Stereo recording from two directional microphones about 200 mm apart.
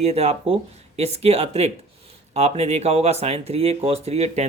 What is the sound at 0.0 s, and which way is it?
Speech, 30° right (ahead or behind).